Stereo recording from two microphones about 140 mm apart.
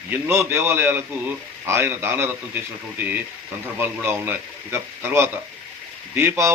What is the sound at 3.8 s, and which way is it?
A man's voice, 15° right (ahead or behind).